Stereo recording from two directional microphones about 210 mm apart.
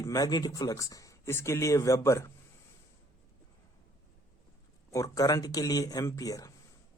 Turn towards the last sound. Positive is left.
turn(degrees=15)  # may be behind; listen again after turning